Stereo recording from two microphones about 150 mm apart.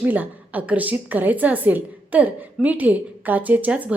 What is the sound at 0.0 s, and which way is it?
A woman's voice, 10° right (ahead or behind).